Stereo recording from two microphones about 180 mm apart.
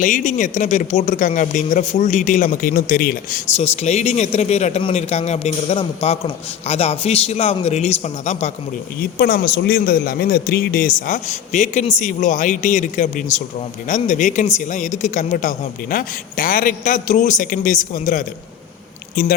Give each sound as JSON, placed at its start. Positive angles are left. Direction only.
{"t": 0.0, "sound": "speech", "side_deg": 45}
{"t": 3.6, "sound": "speech", "side_deg": 40}
{"t": 9.0, "sound": "speech", "side_deg": 55}